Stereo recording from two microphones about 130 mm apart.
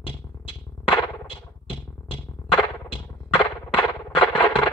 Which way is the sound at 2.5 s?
40° left (ahead or behind).